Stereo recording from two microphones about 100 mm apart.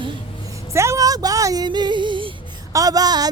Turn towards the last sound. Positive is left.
turn(degrees=-40)  # may be behind; listen again after turning